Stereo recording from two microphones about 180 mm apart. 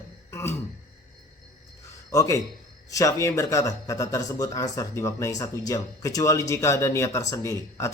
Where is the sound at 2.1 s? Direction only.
15° left (ahead or behind).